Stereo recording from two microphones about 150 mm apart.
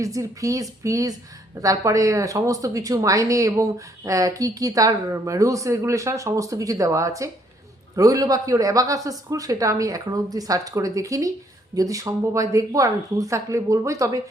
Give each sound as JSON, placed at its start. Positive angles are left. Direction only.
{"t": 0.0, "sound": "speech", "side_deg": -20}